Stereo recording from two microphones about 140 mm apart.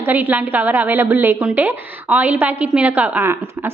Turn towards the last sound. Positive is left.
turn(degrees=-15)  # may be behind; listen again after turning